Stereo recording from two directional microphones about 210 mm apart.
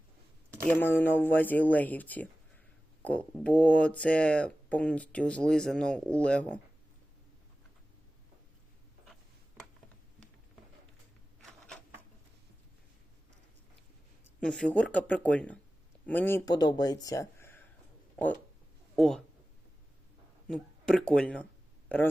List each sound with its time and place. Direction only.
0.7 s speech: 10° left (ahead or behind)
11.4 s a sound: centre (ahead or behind)
14.3 s speech: 5° left (ahead or behind)
18.9 s speech: centre (ahead or behind)
20.5 s speech: 5° left (ahead or behind)